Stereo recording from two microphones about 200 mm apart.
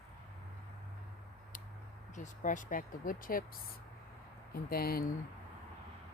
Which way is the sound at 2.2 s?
40° left (ahead or behind).